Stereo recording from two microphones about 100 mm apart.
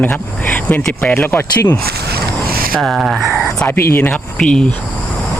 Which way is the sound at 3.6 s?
20° left (ahead or behind).